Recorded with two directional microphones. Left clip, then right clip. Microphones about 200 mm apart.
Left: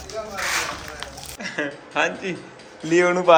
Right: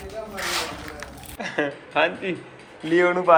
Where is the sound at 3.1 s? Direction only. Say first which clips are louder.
Left 2 dB; 20° left (ahead or behind).